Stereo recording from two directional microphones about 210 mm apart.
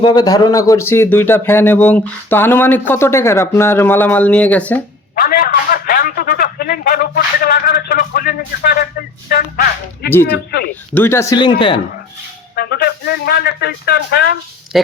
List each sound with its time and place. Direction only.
0.0 s speech: 20° left (ahead or behind)
5.1 s a man's voice: 45° left (ahead or behind)
10.9 s speech: 10° left (ahead or behind)
12.5 s speech: 50° left (ahead or behind)